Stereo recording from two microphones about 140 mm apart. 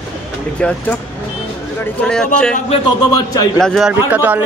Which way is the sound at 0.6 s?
10° left (ahead or behind).